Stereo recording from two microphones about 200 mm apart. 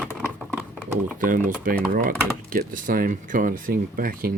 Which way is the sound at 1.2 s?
40° right (ahead or behind).